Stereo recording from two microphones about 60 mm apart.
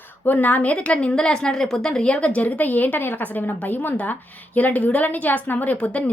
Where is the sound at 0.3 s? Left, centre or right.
Left.